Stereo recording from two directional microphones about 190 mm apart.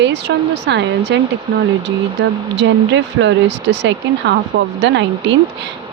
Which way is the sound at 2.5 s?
70° right (ahead or behind).